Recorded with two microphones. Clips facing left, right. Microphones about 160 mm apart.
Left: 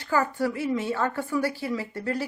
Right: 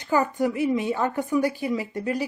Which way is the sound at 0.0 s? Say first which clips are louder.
Right 2 dB; 20° right (ahead or behind).